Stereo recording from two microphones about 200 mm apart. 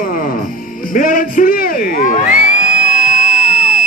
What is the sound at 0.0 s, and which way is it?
Music, 45° left (ahead or behind).